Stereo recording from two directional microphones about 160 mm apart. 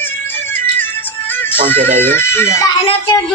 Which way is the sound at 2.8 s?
35° left (ahead or behind).